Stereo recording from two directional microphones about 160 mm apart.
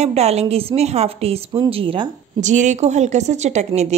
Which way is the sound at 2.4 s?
50° right (ahead or behind).